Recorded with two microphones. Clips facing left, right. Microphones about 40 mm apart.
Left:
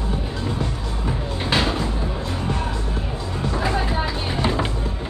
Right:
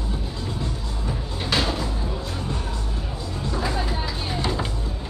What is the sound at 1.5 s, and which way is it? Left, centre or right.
Music, left.